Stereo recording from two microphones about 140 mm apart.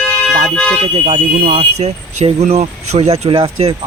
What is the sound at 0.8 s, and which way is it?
Speech, 45° right (ahead or behind).